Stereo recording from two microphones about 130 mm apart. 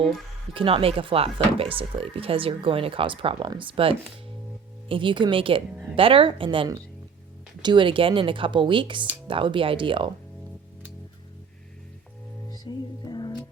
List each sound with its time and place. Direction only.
0.5 s speech: 45° right (ahead or behind)
12.5 s music: 35° left (ahead or behind)